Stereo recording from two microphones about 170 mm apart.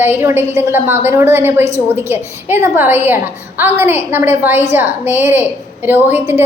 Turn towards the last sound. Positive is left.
turn(degrees=-15)  # may be behind; listen again after turning